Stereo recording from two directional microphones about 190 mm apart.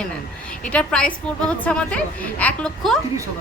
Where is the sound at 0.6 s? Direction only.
5° left (ahead or behind).